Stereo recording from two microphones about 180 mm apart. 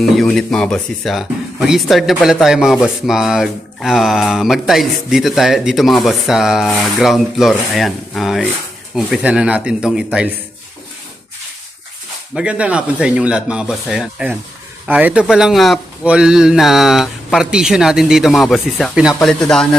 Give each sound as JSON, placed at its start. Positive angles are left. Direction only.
{"t": 0.0, "sound": "speech", "side_deg": 0}
{"t": 12.3, "sound": "speech", "side_deg": -5}